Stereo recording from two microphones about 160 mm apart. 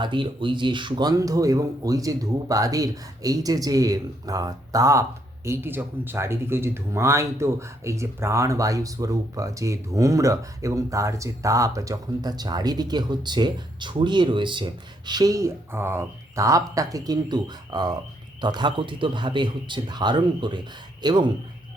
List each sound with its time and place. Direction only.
0.0 s speech: 30° right (ahead or behind)